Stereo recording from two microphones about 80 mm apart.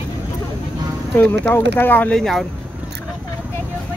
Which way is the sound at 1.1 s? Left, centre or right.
Left.